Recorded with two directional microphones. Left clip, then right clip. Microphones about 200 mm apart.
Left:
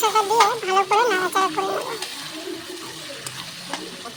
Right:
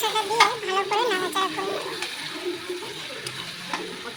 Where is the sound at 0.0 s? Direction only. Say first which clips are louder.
Left 3 dB; 20° left (ahead or behind).